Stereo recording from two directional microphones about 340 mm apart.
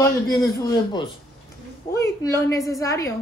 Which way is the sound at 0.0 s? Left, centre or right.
Centre.